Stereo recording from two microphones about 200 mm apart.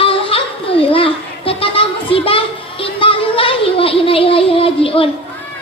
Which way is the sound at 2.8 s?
25° left (ahead or behind).